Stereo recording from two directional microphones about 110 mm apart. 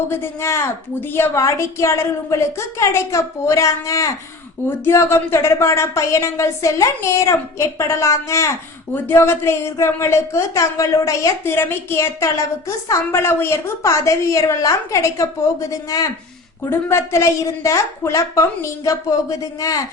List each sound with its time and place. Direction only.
0.1 s speech: 25° left (ahead or behind)
16.6 s speech: 25° left (ahead or behind)